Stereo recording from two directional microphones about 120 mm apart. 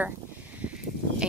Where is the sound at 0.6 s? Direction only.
10° right (ahead or behind).